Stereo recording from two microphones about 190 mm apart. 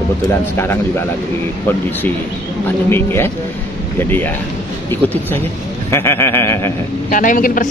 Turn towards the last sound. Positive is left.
turn(degrees=45)  # may be behind; listen again after turning